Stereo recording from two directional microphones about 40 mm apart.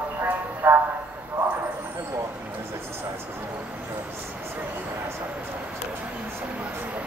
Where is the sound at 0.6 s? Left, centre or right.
Right.